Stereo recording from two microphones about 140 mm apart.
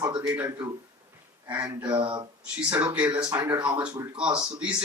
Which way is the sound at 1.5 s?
20° right (ahead or behind).